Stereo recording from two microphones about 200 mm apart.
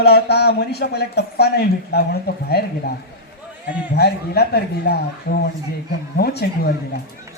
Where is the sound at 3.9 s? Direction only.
55° left (ahead or behind).